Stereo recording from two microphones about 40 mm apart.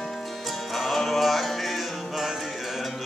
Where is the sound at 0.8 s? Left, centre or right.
Centre.